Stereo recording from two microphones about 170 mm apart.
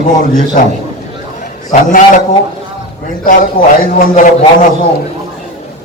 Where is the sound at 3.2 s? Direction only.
55° left (ahead or behind).